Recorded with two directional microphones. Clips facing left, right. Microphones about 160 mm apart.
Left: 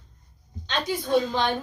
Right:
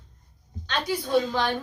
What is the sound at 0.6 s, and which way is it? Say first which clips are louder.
Speech: left 1 dB; 20° left (ahead or behind).